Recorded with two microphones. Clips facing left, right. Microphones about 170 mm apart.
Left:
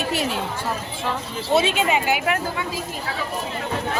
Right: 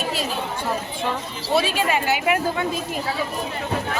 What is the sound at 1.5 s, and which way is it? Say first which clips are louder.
Speech: left 1 dB; 20° left (ahead or behind).